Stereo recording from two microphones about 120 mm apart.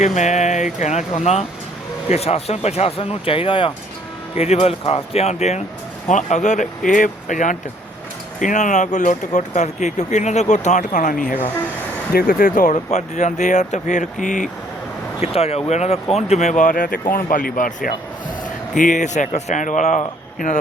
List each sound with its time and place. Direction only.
0.0 s speech: 80° left; by 3.7 s 50° left (ahead or behind)
4.4 s speech: 60° left (ahead or behind)
6.1 s speech: 85° left
12.5 s speech: 80° left
15.2 s speech: 55° left (ahead or behind); by 20.6 s 90° left